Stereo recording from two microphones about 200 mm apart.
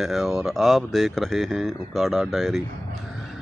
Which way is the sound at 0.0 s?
Centre (ahead or behind).